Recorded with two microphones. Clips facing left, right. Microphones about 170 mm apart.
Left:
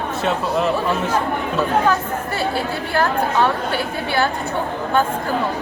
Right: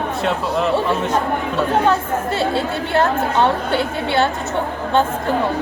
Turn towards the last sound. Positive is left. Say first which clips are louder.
# right 3 dB
turn(degrees=-25)  # may be behind; listen again after turning